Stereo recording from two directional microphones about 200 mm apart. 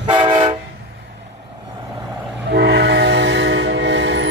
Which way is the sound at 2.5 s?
55° right (ahead or behind).